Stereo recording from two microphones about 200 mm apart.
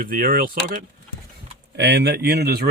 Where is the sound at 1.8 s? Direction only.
60° right (ahead or behind).